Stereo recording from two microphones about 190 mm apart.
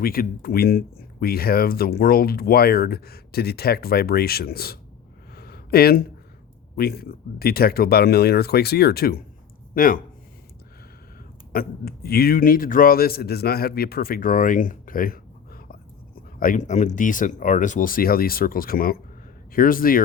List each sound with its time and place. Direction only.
0.0 s speech: 50° left (ahead or behind)
5.3 s a sound: 55° left (ahead or behind)
6.7 s speech: 55° left (ahead or behind)
11.5 s speech: 55° left (ahead or behind)